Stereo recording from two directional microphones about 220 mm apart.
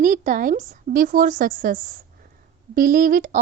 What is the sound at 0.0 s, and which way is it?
A woman's voice, 35° right (ahead or behind).